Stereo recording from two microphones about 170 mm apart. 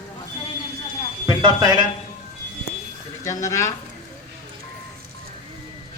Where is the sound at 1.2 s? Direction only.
25° right (ahead or behind).